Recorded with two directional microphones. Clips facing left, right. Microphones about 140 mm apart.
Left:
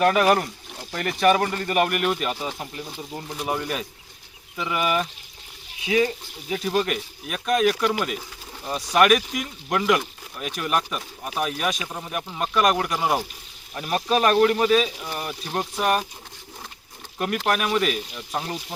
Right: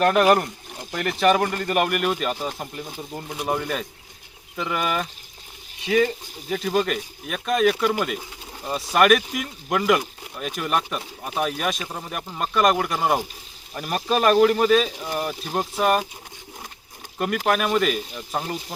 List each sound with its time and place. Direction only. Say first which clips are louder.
0.0 s speech: right 1 dB; centre (ahead or behind)
0.7 s a sound: right 2 dB; 15° right (ahead or behind)
1.2 s speech: even; centre (ahead or behind)
17.2 s speech: right 2 dB; centre (ahead or behind)